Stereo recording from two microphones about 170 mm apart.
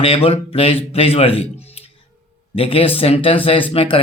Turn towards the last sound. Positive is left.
turn(degrees=35)  # may be behind; listen again after turning